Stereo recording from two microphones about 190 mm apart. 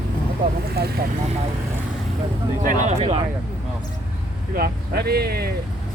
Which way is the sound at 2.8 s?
35° right (ahead or behind).